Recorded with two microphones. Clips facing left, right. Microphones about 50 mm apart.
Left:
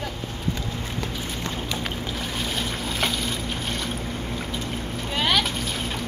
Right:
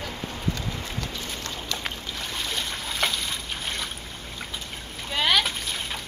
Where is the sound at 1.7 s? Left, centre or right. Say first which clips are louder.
Left 4 dB; centre.